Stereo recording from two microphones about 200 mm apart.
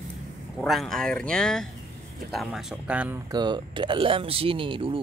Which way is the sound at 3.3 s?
20° right (ahead or behind).